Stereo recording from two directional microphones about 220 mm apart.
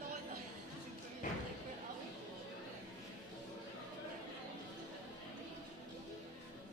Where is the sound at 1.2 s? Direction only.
35° left (ahead or behind).